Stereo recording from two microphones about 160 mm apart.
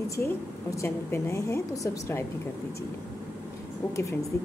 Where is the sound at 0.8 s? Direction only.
15° left (ahead or behind).